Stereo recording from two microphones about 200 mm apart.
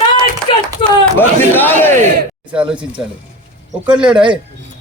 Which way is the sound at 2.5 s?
5° right (ahead or behind).